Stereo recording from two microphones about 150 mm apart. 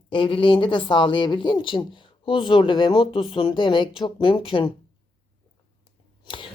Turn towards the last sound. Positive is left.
turn(degrees=35)  # may be behind; listen again after turning